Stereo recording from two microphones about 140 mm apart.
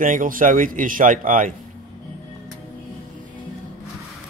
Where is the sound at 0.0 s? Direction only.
75° right (ahead or behind).